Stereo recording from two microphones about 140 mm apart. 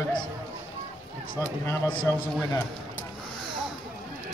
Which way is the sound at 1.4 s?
20° left (ahead or behind).